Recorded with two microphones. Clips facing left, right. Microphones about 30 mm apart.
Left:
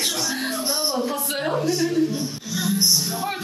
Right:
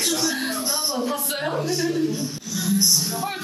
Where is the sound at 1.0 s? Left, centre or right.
Centre.